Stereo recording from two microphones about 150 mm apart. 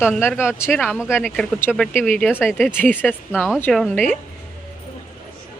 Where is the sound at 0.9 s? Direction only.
5° right (ahead or behind).